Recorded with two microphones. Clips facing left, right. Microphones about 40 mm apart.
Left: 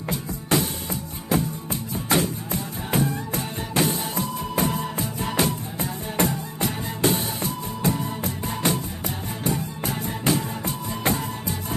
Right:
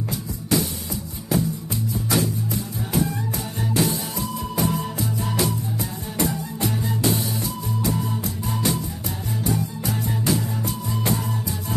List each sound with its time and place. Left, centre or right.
0.1 s music: left